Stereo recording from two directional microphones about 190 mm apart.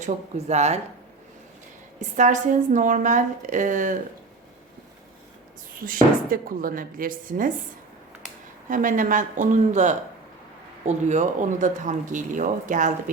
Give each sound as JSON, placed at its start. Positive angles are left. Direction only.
{"t": 0.0, "sound": "speech", "side_deg": -35}
{"t": 2.0, "sound": "speech", "side_deg": -40}
{"t": 5.8, "sound": "speech", "side_deg": -50}
{"t": 8.7, "sound": "speech", "side_deg": -45}